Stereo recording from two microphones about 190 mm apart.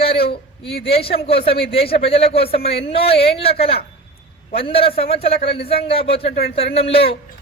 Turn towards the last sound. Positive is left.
turn(degrees=30)  # may be behind; listen again after turning